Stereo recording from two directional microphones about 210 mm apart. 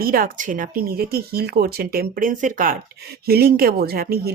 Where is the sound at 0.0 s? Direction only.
45° right (ahead or behind).